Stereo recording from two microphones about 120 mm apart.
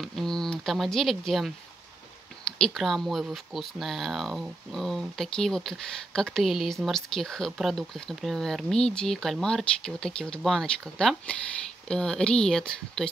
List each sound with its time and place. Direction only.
0.0 s speech: centre (ahead or behind)
2.6 s speech: centre (ahead or behind)